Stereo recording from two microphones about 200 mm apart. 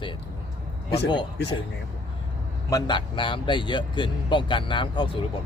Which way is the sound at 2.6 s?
20° left (ahead or behind).